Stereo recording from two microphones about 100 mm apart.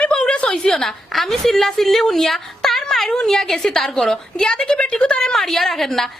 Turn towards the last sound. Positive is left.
turn(degrees=0)  # may be behind; listen again after turning